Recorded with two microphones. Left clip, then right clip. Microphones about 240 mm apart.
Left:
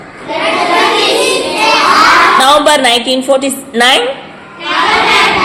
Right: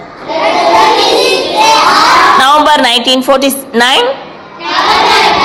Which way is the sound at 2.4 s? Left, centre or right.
Right.